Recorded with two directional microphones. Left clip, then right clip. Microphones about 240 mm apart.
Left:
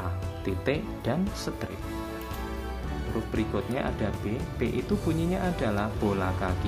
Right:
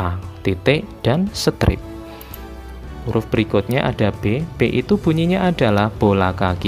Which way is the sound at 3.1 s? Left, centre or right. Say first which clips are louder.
Right 13 dB; right.